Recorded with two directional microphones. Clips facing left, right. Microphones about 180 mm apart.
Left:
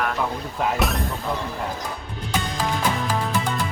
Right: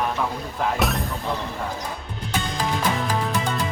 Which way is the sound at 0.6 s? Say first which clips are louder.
Even; centre (ahead or behind).